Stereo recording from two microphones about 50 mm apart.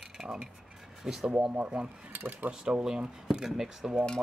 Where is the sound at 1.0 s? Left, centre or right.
Centre.